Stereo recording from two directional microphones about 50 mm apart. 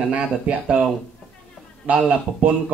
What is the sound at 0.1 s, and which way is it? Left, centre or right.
Speech, right.